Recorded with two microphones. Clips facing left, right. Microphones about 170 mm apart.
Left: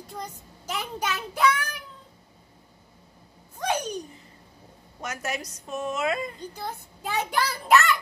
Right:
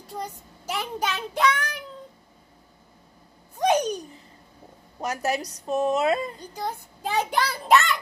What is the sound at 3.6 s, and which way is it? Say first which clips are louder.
Babbling: right 7 dB; 15° right (ahead or behind).